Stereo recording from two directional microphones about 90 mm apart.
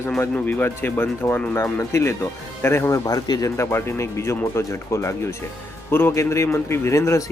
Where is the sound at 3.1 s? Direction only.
45° left (ahead or behind).